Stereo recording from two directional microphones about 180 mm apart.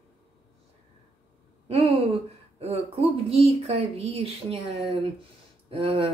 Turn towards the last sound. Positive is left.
turn(degrees=-35)  # may be behind; listen again after turning